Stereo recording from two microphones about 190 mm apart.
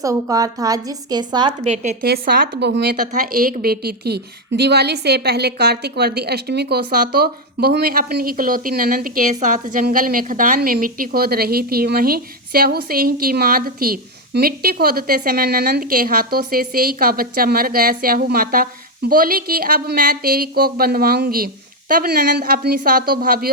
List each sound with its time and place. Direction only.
0.0 s a woman's voice: 20° right (ahead or behind); by 2.0 s 35° right (ahead or behind)
2.0 s a woman's voice: 50° right (ahead or behind)